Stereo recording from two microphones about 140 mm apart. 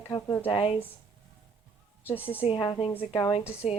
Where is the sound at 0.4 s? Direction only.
40° left (ahead or behind).